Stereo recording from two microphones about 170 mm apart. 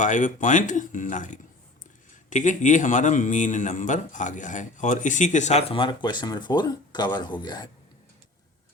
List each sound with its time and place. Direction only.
0.0 s speech: 50° left (ahead or behind); by 7.7 s 25° left (ahead or behind)